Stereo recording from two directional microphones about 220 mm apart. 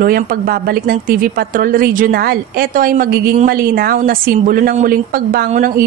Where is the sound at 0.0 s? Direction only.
40° right (ahead or behind).